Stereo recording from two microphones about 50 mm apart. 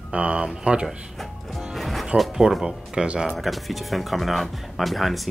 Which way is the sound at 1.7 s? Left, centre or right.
Centre.